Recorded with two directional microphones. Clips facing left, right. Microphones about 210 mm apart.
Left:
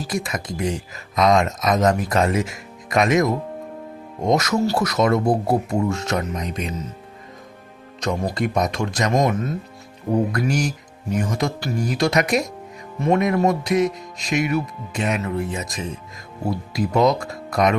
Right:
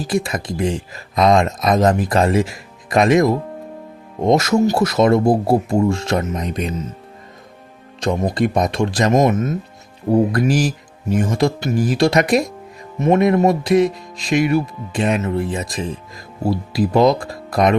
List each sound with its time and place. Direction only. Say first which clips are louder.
0.1 s speech: right 7 dB; 30° right (ahead or behind)
8.0 s speech: right 5 dB; 30° right (ahead or behind)